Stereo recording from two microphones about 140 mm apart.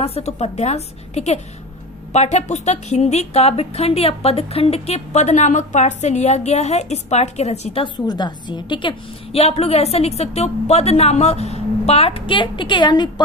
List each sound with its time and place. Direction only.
0.0 s a woman's voice: 50° left (ahead or behind)
7.8 s a woman's voice: 30° left (ahead or behind)